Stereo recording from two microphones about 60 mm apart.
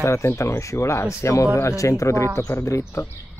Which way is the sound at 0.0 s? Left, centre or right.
Left.